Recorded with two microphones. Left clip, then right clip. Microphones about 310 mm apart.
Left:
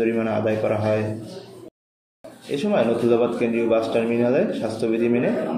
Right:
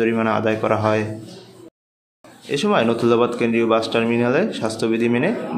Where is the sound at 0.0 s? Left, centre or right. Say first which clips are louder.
Right 3 dB; right.